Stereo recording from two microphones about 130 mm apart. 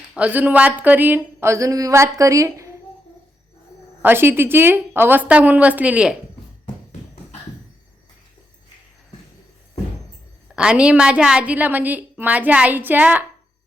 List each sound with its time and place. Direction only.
0.2 s speech: 10° right (ahead or behind)
4.0 s a woman's voice: 15° right (ahead or behind)
10.5 s a woman's voice: 5° right (ahead or behind)